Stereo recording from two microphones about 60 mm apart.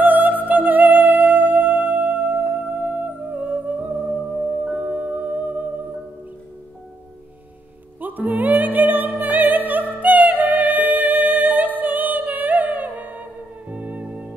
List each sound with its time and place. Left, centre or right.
0.0 s music: right
8.0 s music: right